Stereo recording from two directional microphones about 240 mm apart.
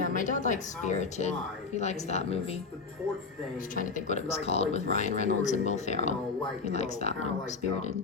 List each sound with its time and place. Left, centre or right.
0.0 s speech: left
3.8 s speech: left